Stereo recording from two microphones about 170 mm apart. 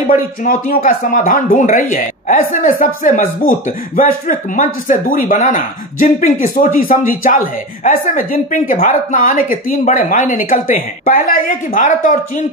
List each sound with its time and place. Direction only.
0.1 s speech: 50° left (ahead or behind)